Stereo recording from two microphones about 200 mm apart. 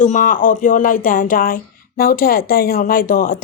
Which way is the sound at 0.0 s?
40° left (ahead or behind).